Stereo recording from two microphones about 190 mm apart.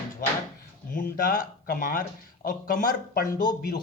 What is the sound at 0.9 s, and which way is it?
Speech, 50° left (ahead or behind).